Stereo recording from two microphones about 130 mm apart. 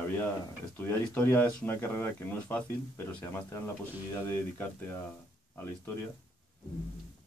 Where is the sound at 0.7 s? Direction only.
15° left (ahead or behind).